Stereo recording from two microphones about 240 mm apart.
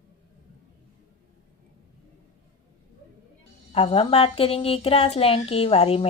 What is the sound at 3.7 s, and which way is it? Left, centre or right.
Speech, left.